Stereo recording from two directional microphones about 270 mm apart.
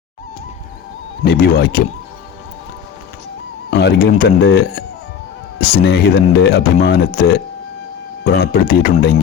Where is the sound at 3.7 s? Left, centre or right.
Left.